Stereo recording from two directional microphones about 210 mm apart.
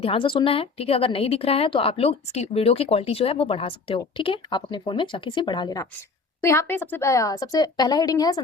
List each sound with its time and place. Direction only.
0.0 s a woman's voice: 25° left (ahead or behind)